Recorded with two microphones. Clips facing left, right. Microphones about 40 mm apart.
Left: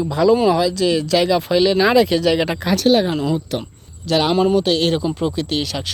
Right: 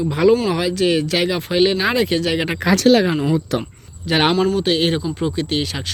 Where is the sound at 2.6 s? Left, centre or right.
Right.